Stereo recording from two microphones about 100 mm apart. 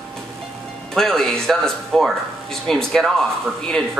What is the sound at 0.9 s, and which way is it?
Speech, 5° left (ahead or behind).